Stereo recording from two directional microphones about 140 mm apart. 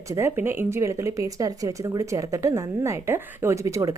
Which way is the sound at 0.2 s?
15° right (ahead or behind).